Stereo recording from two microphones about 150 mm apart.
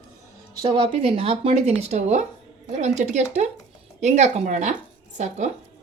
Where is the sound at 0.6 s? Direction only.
35° right (ahead or behind); by 5.5 s 50° right (ahead or behind).